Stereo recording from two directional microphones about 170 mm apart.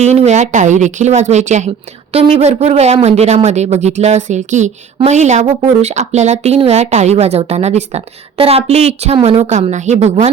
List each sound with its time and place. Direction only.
0.0 s speech: 40° right (ahead or behind)